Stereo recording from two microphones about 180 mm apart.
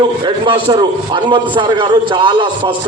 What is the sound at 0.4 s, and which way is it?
A man's voice, 30° right (ahead or behind).